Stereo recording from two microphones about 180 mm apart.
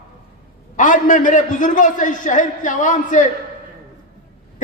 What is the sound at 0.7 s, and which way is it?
A man's voice, 45° left (ahead or behind).